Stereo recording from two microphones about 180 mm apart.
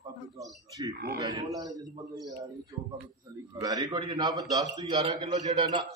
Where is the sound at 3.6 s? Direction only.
20° right (ahead or behind).